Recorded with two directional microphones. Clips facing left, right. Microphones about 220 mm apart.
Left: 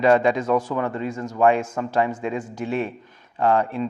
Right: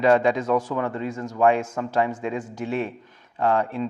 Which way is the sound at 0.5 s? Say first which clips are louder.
Left 1 dB; 25° left (ahead or behind).